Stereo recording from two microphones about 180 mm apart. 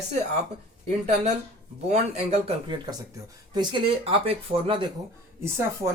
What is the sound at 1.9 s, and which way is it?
Speech, 35° right (ahead or behind).